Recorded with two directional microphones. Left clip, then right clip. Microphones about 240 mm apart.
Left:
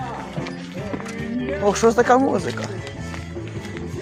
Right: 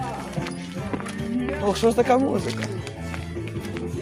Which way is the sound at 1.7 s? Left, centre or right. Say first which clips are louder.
Left 3 dB; centre.